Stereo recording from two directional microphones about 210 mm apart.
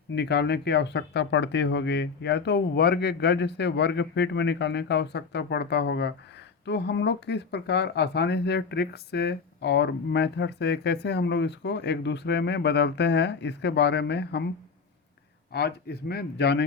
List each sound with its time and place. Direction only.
0.1 s speech: 50° left (ahead or behind)
15.5 s speech: 50° left (ahead or behind)